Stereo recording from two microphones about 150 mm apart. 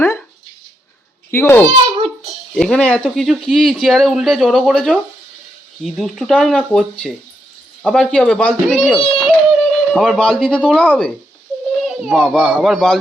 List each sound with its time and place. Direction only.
1.3 s a child's voice: 15° left (ahead or behind)
2.0 s a sound: 40° right (ahead or behind)
2.6 s speech: 5° left (ahead or behind)
9.1 s music: centre (ahead or behind)
11.9 s speech: centre (ahead or behind)